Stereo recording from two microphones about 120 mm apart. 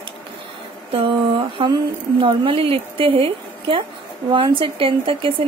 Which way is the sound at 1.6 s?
45° right (ahead or behind).